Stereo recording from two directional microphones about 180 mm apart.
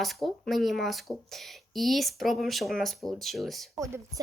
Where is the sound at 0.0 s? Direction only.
Centre (ahead or behind).